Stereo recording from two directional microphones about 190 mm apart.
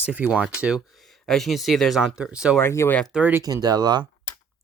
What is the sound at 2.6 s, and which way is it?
Speech, 15° left (ahead or behind).